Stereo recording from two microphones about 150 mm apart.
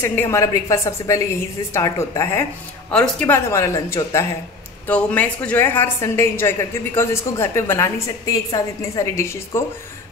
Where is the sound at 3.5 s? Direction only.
20° left (ahead or behind).